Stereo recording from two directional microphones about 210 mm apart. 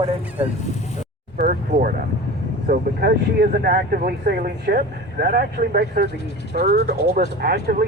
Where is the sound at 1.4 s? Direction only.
45° right (ahead or behind).